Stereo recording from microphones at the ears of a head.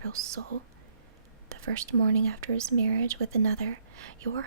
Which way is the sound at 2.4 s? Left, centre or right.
Right.